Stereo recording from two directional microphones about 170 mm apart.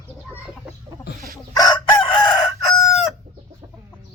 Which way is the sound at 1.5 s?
25° left (ahead or behind).